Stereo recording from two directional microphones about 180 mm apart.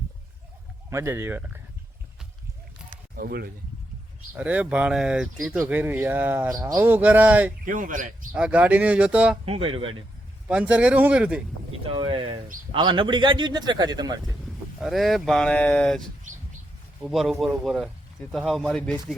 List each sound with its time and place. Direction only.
0.9 s speech: 15° right (ahead or behind)
3.2 s speech: 55° right (ahead or behind)
4.4 s speech: 10° right (ahead or behind)
7.6 s speech: 45° right (ahead or behind)
8.4 s speech: 5° right (ahead or behind)
9.5 s speech: 30° right (ahead or behind)
10.5 s speech: 5° right (ahead or behind)
11.9 s speech: 25° right (ahead or behind)
14.3 s speech: centre (ahead or behind)